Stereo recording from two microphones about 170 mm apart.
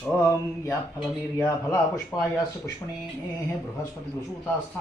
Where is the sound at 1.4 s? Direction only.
20° left (ahead or behind).